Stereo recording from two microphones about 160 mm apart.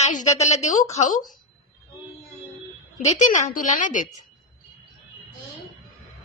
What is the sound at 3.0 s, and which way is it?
A woman's voice, 45° left (ahead or behind).